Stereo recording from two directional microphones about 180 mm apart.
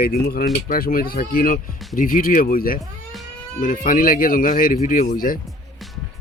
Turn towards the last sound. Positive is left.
turn(degrees=55)  # may be behind; listen again after turning